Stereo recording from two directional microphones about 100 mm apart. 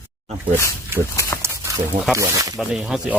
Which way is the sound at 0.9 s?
20° right (ahead or behind).